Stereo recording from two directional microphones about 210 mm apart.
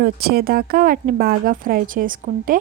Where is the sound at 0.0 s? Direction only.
45° right (ahead or behind).